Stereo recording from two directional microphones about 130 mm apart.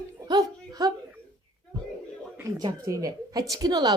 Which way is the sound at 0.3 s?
30° right (ahead or behind).